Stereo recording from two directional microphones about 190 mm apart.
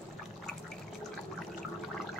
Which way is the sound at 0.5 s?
5° left (ahead or behind).